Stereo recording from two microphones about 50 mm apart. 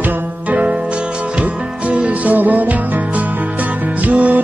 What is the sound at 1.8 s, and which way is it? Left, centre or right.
Music, right.